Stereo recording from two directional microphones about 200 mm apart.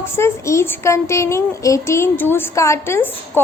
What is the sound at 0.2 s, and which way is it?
A child's voice, 15° left (ahead or behind).